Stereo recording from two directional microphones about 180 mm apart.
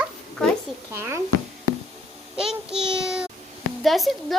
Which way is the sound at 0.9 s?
15° right (ahead or behind).